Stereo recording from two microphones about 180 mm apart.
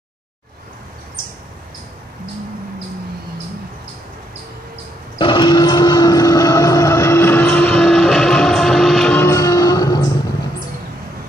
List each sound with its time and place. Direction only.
5.2 s vehicle: 25° left (ahead or behind)